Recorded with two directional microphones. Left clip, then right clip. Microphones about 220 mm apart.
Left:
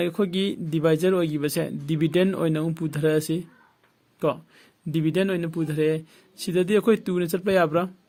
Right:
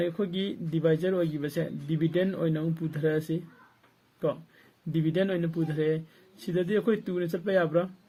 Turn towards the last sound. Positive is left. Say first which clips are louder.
# left 4 dB
turn(degrees=45)  # may be behind; listen again after turning